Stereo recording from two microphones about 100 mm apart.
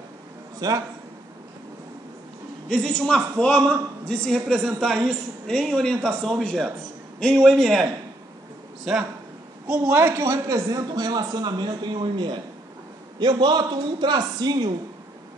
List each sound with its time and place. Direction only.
0.6 s a man's voice: 40° right (ahead or behind)
2.7 s a woman's voice: 10° left (ahead or behind)
8.9 s a man's voice: 5° right (ahead or behind)
9.8 s a man's voice: 20° right (ahead or behind); by 14.8 s 45° right (ahead or behind)